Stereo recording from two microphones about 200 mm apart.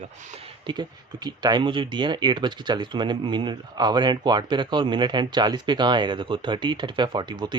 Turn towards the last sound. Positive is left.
turn(degrees=-20)  # may be behind; listen again after turning